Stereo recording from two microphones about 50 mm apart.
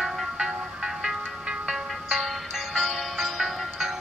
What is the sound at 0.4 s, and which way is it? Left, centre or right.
Music, centre.